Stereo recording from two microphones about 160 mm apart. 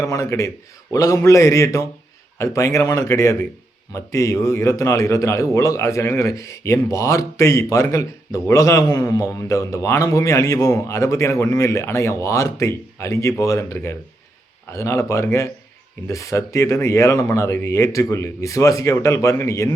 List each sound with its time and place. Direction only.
0.0 s a man's voice: 20° left (ahead or behind)